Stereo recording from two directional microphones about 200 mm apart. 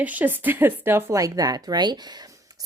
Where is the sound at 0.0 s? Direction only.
10° right (ahead or behind).